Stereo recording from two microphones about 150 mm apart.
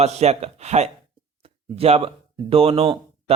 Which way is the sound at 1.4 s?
40° right (ahead or behind).